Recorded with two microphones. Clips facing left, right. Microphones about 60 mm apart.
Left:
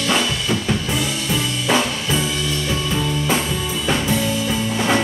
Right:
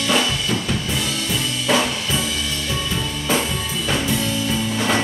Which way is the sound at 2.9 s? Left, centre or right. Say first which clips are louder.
Left 2 dB; centre.